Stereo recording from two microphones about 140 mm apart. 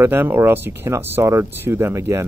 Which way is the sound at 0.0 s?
15° right (ahead or behind).